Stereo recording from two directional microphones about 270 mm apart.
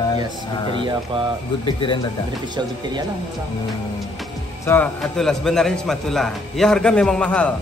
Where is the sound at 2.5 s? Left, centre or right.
Centre.